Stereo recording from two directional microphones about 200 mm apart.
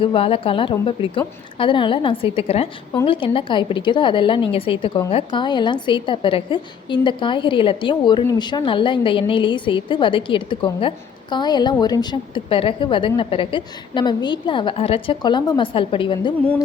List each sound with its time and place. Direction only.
0.0 s a woman's voice: 25° left (ahead or behind)